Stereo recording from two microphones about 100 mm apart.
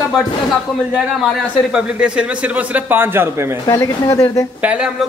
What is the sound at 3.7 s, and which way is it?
Speech, 30° left (ahead or behind).